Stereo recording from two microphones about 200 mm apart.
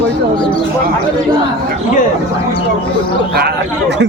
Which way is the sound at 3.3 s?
55° right (ahead or behind).